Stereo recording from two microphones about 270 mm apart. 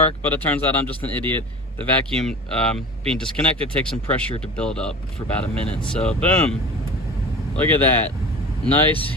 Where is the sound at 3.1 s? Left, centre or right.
Centre.